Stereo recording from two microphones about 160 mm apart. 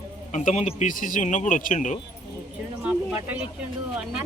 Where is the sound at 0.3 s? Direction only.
45° left (ahead or behind).